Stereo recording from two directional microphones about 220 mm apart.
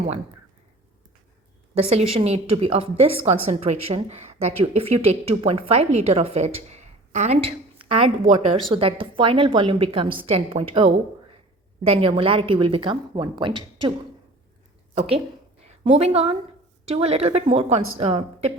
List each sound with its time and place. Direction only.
1.7 s a woman's voice: 30° right (ahead or behind)
14.9 s a woman's voice: 25° right (ahead or behind)